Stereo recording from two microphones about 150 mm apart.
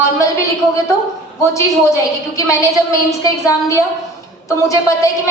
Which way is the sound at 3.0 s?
20° left (ahead or behind).